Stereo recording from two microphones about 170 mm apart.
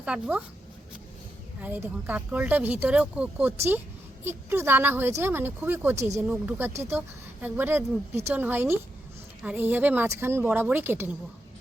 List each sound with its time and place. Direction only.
0.0 s speech: 5° right (ahead or behind)
1.6 s speech: 10° right (ahead or behind)